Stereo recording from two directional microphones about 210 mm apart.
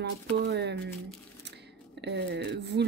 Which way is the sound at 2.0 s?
55° right (ahead or behind).